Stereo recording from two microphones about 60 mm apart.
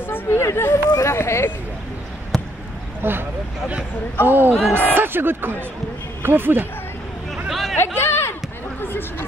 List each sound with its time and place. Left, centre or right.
0.0 s speech: left
0.8 s a sound: left
1.1 s speech: left
2.3 s basketball bounce: centre
3.0 s speech: right
4.3 s speech: right
7.4 s hubbub: centre
7.7 s chatter: left